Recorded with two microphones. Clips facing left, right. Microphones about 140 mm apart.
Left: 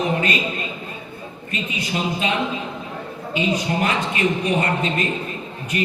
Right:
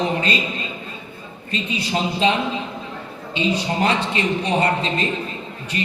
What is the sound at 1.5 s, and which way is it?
Speech, 30° right (ahead or behind).